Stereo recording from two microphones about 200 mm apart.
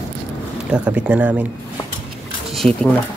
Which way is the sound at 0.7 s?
5° right (ahead or behind).